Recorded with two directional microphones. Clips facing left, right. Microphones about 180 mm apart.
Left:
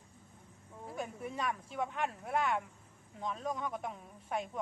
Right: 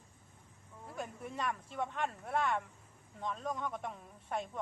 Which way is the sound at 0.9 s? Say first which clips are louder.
Left 2 dB; 5° left (ahead or behind).